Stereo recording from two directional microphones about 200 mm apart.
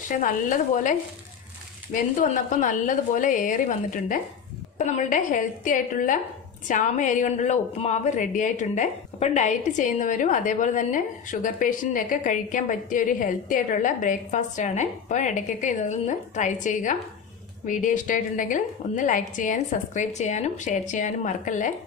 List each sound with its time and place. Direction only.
0.2 s a woman's voice: 40° left (ahead or behind)
2.6 s a woman's voice: 40° left (ahead or behind)